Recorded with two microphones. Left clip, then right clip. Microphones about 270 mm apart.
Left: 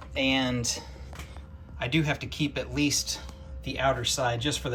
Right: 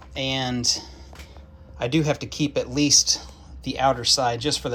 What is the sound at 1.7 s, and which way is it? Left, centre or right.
Speech, centre.